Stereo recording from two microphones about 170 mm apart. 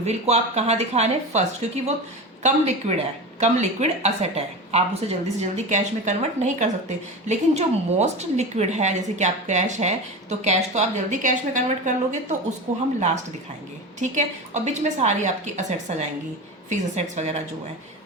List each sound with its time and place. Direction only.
0.0 s a woman's voice: 40° right (ahead or behind)
14.0 s a woman's voice: 45° right (ahead or behind)